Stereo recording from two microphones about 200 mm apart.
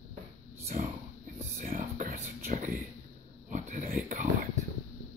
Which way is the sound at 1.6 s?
40° right (ahead or behind).